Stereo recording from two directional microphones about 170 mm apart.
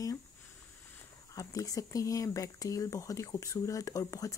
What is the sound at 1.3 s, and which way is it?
Speech, 20° left (ahead or behind).